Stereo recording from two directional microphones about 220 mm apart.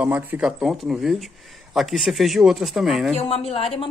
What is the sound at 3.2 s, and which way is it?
Speech, 25° left (ahead or behind).